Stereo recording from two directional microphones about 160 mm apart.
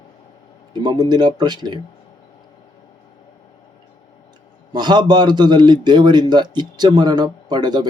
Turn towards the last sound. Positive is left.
turn(degrees=-25)  # may be behind; listen again after turning